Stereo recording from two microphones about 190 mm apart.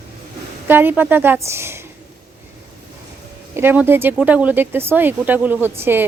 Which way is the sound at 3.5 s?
10° right (ahead or behind).